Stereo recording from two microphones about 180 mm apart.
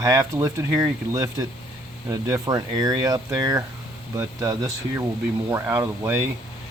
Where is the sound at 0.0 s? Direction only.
20° right (ahead or behind).